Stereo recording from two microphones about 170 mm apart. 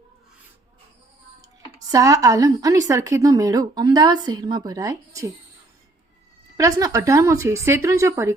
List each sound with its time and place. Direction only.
1.9 s a woman's voice: 20° right (ahead or behind)
6.6 s speech: 20° right (ahead or behind)